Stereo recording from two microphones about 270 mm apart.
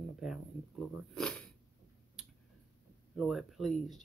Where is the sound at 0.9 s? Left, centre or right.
Centre.